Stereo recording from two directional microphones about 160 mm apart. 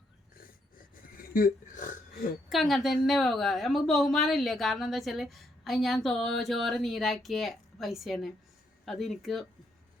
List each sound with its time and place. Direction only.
1.0 s speech: 65° left (ahead or behind)
2.5 s a woman's voice: centre (ahead or behind)